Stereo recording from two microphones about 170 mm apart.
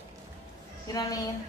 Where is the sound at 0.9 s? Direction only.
20° left (ahead or behind).